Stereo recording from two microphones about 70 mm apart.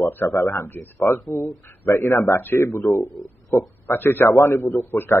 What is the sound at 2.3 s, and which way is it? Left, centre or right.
A man's voice, left.